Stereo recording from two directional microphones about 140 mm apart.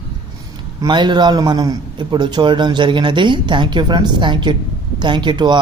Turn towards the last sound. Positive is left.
turn(degrees=-35)  # may be behind; listen again after turning